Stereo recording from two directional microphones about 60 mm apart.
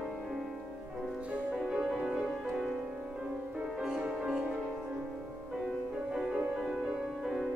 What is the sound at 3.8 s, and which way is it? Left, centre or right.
Music, centre.